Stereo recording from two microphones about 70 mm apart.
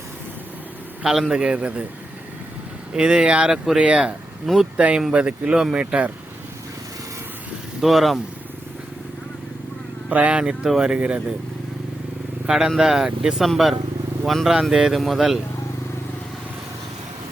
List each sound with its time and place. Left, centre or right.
1.0 s speech: centre
2.9 s speech: centre
4.4 s speech: centre
4.8 s speech: centre
7.8 s speech: centre
10.1 s speech: right
12.5 s speech: centre